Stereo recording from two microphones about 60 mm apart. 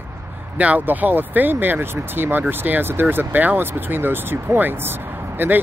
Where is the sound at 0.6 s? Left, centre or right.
Right.